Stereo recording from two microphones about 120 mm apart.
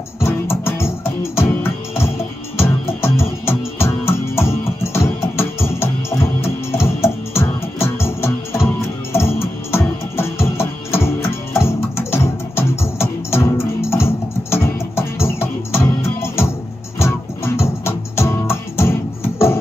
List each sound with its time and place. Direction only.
0.2 s music: 20° left (ahead or behind)